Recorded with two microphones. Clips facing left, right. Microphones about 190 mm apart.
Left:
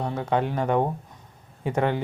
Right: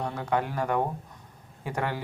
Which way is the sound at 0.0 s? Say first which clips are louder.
Left 3 dB; 25° left (ahead or behind).